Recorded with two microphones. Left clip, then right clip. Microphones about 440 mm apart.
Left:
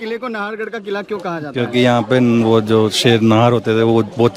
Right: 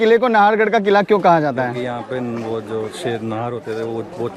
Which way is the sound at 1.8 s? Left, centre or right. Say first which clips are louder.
Left 10 dB; left.